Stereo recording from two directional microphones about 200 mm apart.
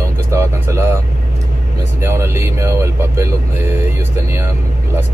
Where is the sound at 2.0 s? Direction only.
10° right (ahead or behind).